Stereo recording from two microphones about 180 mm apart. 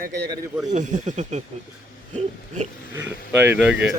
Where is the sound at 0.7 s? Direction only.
40° right (ahead or behind).